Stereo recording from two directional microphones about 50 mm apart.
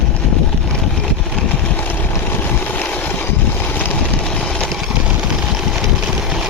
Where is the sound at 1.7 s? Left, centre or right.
Left.